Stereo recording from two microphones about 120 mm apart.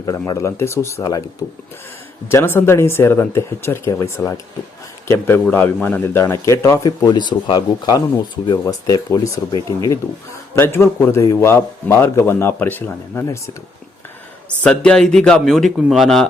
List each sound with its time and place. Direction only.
0.0 s a man's voice: 30° left (ahead or behind)
14.6 s speech: 10° left (ahead or behind)